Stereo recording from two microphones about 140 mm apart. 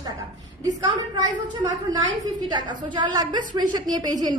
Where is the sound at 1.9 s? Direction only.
30° right (ahead or behind).